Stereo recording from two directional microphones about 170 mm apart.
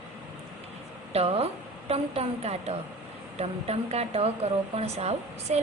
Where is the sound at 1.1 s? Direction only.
35° right (ahead or behind).